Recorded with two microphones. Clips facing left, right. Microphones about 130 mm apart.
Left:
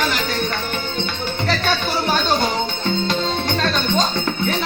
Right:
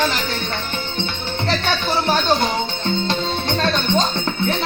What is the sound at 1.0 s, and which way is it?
Music, 25° right (ahead or behind).